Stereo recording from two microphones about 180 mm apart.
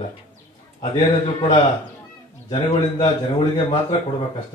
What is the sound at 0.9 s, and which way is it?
Mantra, 35° left (ahead or behind).